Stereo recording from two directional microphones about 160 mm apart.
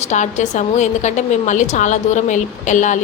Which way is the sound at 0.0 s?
50° left (ahead or behind).